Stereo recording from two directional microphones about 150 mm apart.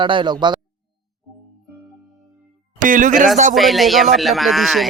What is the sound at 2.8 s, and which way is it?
Speech, 60° right (ahead or behind).